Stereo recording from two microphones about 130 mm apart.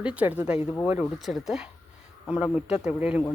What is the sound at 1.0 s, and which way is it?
A man's voice, centre (ahead or behind).